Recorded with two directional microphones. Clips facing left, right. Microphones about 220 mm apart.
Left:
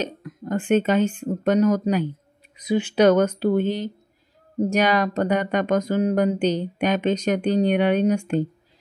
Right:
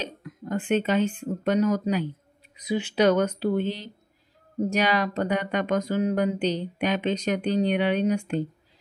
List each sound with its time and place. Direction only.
0.0 s speech: 45° left (ahead or behind)